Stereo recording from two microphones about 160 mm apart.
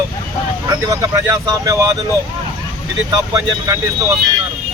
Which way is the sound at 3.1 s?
20° right (ahead or behind).